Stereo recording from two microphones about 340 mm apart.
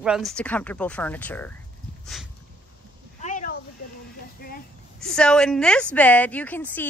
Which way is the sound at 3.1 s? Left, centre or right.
Left.